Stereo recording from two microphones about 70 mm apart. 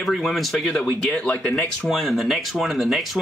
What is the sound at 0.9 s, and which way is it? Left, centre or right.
Speech, left.